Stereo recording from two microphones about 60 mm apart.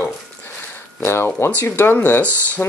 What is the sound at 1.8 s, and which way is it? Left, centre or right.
Speech, left.